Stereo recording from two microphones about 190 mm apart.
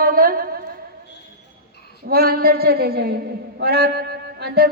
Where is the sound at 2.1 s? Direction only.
50° right (ahead or behind).